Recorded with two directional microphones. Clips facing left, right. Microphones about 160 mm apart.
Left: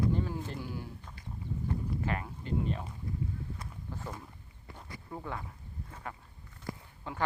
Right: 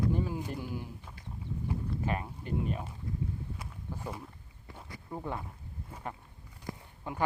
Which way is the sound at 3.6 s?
10° right (ahead or behind).